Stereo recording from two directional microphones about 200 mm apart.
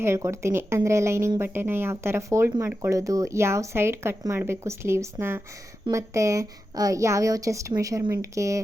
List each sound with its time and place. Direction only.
0.0 s speech: 15° right (ahead or behind)